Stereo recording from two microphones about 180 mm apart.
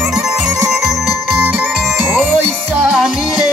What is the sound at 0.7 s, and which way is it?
Music, centre (ahead or behind).